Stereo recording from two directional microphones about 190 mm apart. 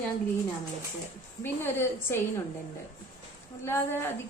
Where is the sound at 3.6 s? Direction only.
10° left (ahead or behind).